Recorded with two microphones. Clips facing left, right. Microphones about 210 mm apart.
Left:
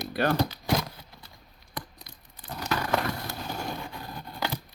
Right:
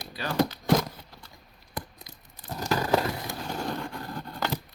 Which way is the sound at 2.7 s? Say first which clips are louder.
Right 3 dB; 35° right (ahead or behind).